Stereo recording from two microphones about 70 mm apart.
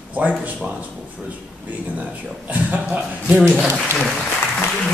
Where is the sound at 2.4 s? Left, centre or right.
Right.